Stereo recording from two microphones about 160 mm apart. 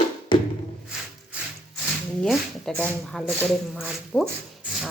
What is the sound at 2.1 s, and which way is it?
Speech, 5° left (ahead or behind).